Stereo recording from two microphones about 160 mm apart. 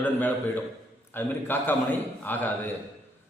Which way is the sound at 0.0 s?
10° left (ahead or behind).